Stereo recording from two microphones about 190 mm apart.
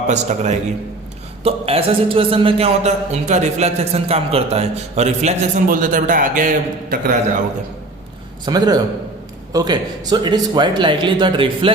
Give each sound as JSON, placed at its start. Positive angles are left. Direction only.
{"t": 0.1, "sound": "a man's voice", "side_deg": -35}
{"t": 8.4, "sound": "speech", "side_deg": -20}